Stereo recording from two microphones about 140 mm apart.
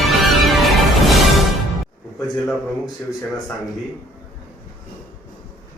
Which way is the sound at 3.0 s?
20° left (ahead or behind).